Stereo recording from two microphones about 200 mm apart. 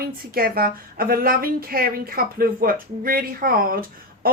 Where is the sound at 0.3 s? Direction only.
50° right (ahead or behind).